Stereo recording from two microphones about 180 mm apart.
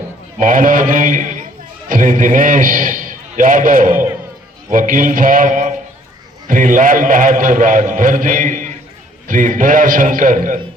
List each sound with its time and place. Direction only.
0.3 s a man's voice: 45° right (ahead or behind)